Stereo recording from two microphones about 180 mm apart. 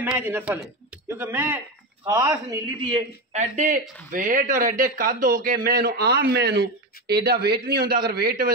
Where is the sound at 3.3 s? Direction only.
40° right (ahead or behind).